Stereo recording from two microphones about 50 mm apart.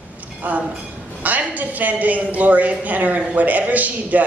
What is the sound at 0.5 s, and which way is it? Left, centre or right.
A woman's voice, right.